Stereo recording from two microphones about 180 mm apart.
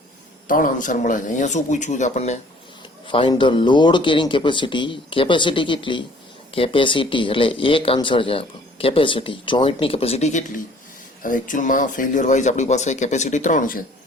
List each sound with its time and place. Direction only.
0.4 s speech: 50° left (ahead or behind)
3.1 s speech: 30° left (ahead or behind); by 13.7 s 45° left (ahead or behind)